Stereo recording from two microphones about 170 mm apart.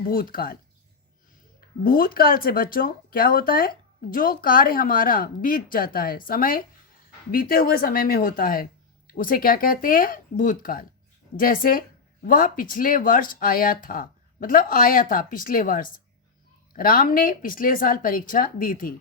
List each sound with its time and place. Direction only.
0.1 s speech: 60° left (ahead or behind)
1.8 s speech: 60° left (ahead or behind)